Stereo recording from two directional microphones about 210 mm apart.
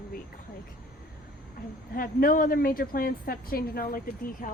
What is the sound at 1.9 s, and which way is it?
A woman's voice, 40° left (ahead or behind).